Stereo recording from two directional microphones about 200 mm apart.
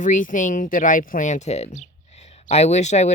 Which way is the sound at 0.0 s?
40° left (ahead or behind).